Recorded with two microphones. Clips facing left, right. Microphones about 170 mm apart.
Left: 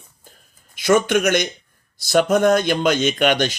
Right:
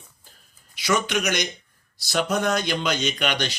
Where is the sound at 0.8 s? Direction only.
50° left (ahead or behind).